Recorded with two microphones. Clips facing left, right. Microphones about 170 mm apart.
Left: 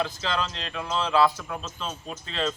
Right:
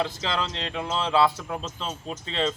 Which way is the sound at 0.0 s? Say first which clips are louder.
Right 1 dB; 25° right (ahead or behind).